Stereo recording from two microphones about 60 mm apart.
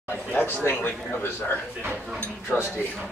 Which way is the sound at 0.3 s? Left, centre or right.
Left.